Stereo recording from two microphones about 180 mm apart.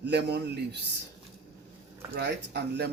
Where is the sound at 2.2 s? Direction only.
70° right (ahead or behind).